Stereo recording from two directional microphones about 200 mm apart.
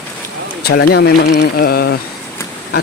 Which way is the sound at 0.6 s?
50° left (ahead or behind).